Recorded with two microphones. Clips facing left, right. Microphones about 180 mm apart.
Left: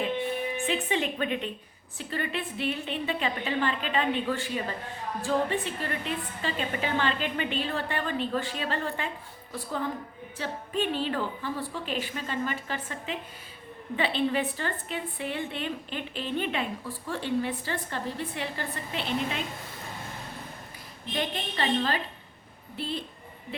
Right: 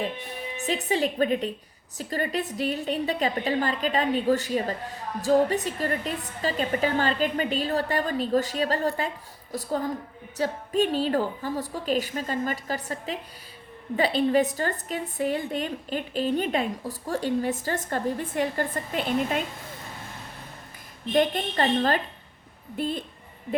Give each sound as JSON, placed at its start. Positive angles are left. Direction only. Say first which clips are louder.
{"t": 0.6, "sound": "a woman's voice", "louder": "right 6 dB", "side_deg": -40}
{"t": 21.1, "sound": "a woman's voice", "louder": "right 9 dB", "side_deg": -45}